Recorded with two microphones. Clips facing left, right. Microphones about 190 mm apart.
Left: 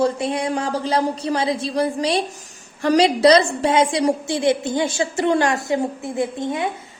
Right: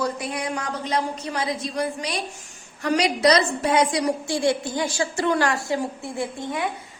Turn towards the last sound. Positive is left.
turn(degrees=20)  # may be behind; listen again after turning